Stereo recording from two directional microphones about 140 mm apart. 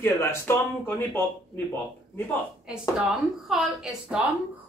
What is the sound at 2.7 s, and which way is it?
A woman's voice, 5° right (ahead or behind).